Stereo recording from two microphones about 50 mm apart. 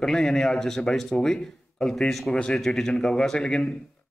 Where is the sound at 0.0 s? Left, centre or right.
Centre.